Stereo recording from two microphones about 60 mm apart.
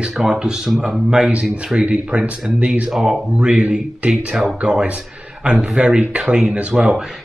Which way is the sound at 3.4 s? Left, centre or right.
Centre.